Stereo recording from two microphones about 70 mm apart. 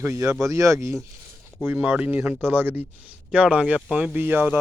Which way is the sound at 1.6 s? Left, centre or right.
Right.